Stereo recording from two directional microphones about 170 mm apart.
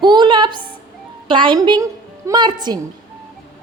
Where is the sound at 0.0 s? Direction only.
25° right (ahead or behind).